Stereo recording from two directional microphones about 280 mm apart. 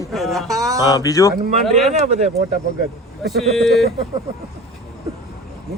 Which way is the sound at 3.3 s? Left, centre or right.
Centre.